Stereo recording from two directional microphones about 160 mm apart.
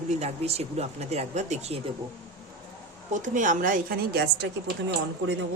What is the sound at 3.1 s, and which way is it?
A woman's voice, 50° right (ahead or behind).